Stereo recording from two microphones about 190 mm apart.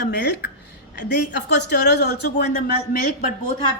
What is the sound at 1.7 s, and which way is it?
Speech, 60° left (ahead or behind).